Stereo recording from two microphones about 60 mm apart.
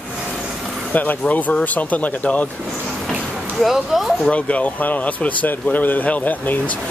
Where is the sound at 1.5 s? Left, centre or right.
Left.